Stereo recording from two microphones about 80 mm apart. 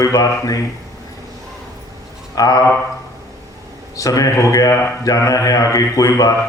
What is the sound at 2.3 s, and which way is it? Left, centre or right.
Speech, left.